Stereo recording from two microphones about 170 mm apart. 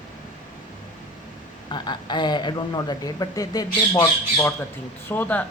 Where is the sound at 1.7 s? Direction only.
25° left (ahead or behind).